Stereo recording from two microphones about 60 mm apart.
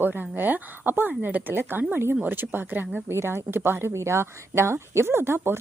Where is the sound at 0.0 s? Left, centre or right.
Right.